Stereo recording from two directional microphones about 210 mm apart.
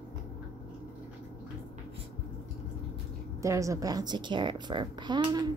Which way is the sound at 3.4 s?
15° right (ahead or behind).